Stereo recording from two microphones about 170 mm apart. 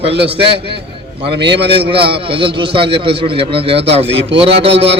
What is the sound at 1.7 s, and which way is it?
A man's voice, 30° right (ahead or behind).